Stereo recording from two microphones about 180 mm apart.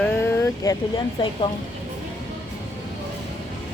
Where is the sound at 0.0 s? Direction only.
10° left (ahead or behind).